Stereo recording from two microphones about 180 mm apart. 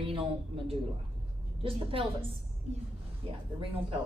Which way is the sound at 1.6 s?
30° right (ahead or behind).